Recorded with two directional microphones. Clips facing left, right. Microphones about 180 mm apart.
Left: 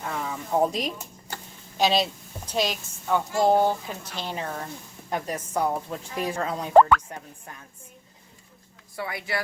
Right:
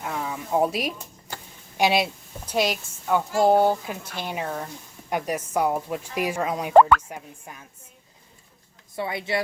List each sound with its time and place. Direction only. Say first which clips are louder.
0.0 s speech: right 1 dB; 10° right (ahead or behind)
9.0 s speech: right 4 dB; 25° right (ahead or behind)